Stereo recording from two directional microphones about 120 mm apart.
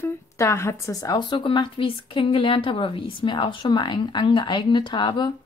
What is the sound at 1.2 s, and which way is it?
Speech, 45° left (ahead or behind).